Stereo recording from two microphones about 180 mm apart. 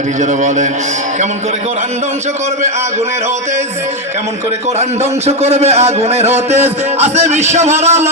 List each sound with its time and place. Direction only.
0.2 s a man's voice: 40° right (ahead or behind)
4.8 s a man's voice: 35° right (ahead or behind)